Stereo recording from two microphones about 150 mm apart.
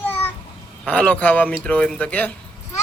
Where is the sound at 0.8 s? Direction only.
10° left (ahead or behind).